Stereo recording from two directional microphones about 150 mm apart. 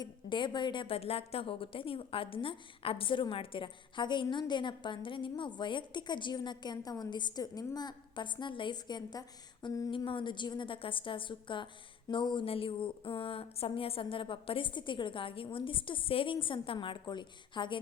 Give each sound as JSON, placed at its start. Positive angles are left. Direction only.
{"t": 0.0, "sound": "a woman's voice", "side_deg": 30}
{"t": 9.6, "sound": "a sound", "side_deg": 25}
{"t": 9.9, "sound": "a woman's voice", "side_deg": 35}